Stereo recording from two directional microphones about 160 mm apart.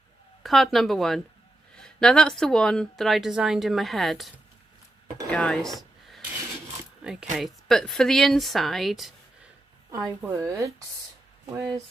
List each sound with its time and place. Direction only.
0.4 s speech: centre (ahead or behind)
5.3 s a sound: 5° left (ahead or behind)
7.0 s a woman's voice: 5° right (ahead or behind); by 11.8 s 20° right (ahead or behind)